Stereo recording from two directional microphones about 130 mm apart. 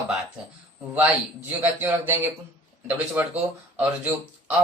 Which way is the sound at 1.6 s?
15° right (ahead or behind).